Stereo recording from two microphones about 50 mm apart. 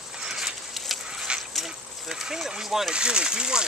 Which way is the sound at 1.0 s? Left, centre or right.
Centre.